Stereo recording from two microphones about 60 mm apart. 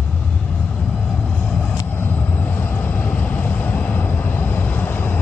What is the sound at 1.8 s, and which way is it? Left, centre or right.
Vehicle, left.